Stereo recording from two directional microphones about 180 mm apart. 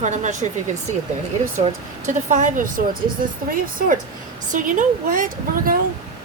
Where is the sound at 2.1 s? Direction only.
45° right (ahead or behind).